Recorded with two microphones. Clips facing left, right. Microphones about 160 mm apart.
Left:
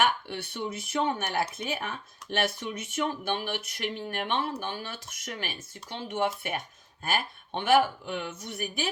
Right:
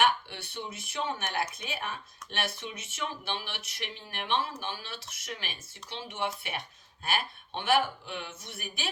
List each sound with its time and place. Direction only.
0.3 s speech: 50° left (ahead or behind)